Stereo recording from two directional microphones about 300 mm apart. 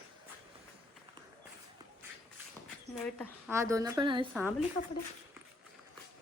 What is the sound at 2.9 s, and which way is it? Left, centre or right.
A woman's voice, centre.